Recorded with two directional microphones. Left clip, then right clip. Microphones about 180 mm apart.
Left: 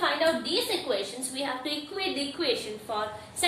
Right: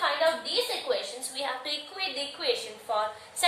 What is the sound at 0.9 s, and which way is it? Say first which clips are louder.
A woman's voice: even; 15° right (ahead or behind).